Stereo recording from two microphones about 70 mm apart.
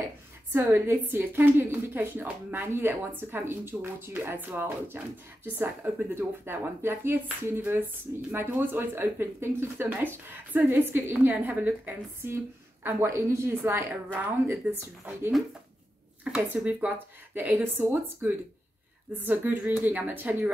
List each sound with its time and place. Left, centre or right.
0.5 s a woman's voice: right
12.8 s a woman's voice: right
16.3 s speech: centre